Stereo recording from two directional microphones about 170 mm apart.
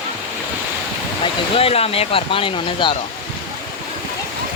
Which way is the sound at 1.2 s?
35° left (ahead or behind).